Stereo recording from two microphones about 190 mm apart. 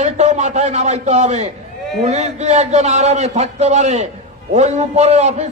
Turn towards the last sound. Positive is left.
turn(degrees=-35)  # may be behind; listen again after turning